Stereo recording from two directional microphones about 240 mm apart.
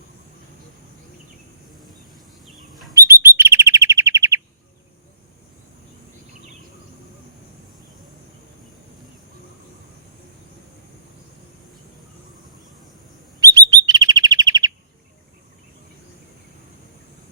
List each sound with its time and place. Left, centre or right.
2.9 s chirp: centre
13.4 s chirp: centre